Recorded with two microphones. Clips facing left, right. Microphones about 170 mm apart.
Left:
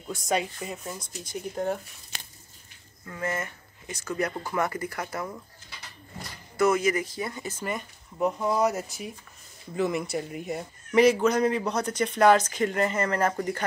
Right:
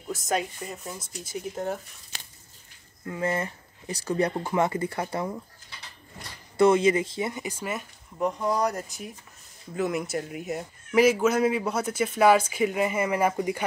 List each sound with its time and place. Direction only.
0.1 s a man's voice: centre (ahead or behind)
3.1 s speech: 30° right (ahead or behind)
6.5 s speech: 30° right (ahead or behind)
7.4 s a man's voice: 5° right (ahead or behind)